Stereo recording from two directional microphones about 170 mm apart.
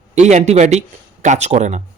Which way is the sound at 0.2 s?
45° right (ahead or behind).